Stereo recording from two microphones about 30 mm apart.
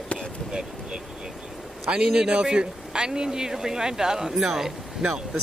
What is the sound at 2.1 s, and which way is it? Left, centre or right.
Speech, right.